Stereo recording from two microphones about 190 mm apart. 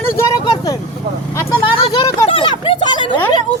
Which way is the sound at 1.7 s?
30° left (ahead or behind).